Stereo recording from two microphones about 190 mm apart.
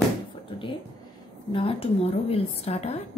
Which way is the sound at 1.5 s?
30° left (ahead or behind).